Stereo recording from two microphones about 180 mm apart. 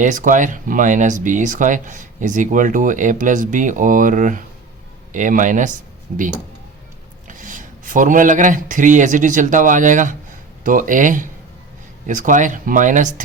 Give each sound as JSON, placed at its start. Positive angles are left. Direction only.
{"t": 0.0, "sound": "speech", "side_deg": -45}
{"t": 7.3, "sound": "speech", "side_deg": -45}